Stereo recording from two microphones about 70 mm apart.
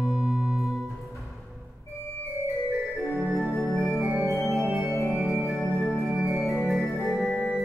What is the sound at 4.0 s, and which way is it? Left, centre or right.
Organ, centre.